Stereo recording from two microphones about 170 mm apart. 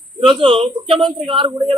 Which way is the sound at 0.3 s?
30° right (ahead or behind).